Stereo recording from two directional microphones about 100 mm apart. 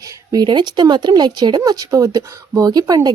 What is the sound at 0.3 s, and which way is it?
A woman's voice, 45° right (ahead or behind).